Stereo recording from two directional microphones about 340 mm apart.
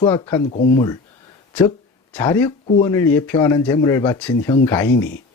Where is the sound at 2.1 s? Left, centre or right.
Centre.